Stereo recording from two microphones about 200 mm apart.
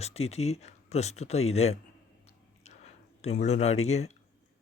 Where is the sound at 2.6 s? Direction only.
35° left (ahead or behind).